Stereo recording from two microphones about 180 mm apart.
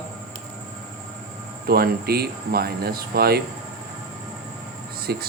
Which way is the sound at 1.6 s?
60° right (ahead or behind).